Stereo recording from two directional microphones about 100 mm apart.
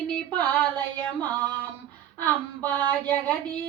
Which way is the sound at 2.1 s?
15° left (ahead or behind).